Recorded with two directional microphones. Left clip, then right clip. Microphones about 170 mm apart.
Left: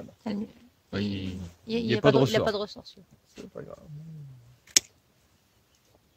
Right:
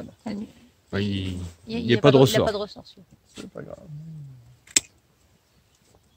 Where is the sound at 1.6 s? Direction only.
65° left (ahead or behind).